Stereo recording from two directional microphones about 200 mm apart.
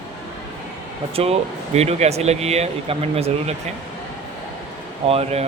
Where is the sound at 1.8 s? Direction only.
35° right (ahead or behind).